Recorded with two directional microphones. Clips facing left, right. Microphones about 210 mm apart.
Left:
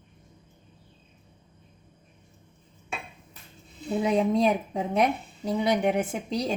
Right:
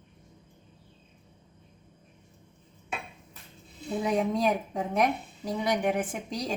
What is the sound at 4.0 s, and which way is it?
A woman's voice, 25° left (ahead or behind).